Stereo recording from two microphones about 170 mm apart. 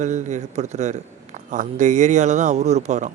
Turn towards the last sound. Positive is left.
turn(degrees=-45)  # may be behind; listen again after turning